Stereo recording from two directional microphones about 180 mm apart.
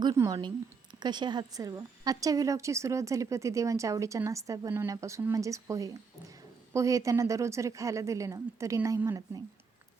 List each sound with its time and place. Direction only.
0.2 s a woman's voice: 20° right (ahead or behind)